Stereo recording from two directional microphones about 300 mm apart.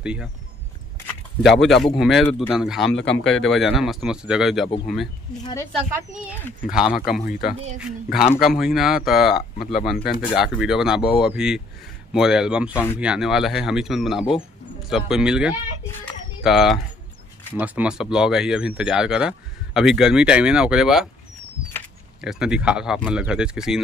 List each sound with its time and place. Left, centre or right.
0.0 s speech: centre
5.4 s speech: centre
5.7 s speech: centre
7.2 s speech: left
8.1 s speech: centre